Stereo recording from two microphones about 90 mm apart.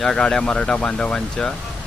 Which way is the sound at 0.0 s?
5° left (ahead or behind).